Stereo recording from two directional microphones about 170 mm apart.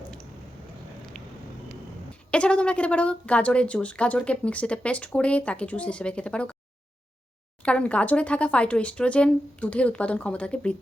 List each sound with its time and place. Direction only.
2.3 s speech: 5° left (ahead or behind)
7.6 s speech: 5° left (ahead or behind)